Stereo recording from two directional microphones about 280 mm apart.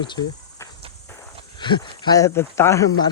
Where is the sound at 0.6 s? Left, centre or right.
Centre.